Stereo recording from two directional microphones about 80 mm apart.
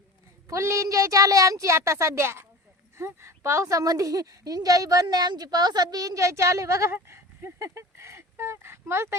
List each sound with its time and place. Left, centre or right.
0.4 s a woman's voice: right
5.0 s a woman's voice: right